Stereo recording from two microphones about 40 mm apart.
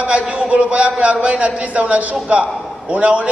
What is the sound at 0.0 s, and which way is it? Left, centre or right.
A man's voice, right.